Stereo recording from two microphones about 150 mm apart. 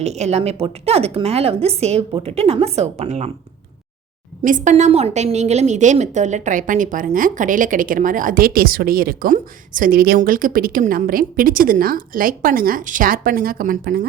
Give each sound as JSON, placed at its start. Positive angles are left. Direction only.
{"t": 0.0, "sound": "a woman's voice", "side_deg": -45}
{"t": 4.4, "sound": "a woman's voice", "side_deg": -55}